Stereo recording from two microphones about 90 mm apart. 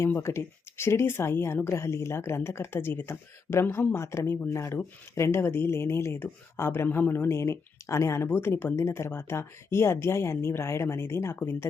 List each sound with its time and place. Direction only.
0.0 s speech: 30° left (ahead or behind)